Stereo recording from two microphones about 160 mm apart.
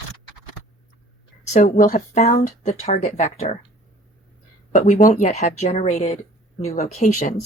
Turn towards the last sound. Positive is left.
turn(degrees=50)  # may be behind; listen again after turning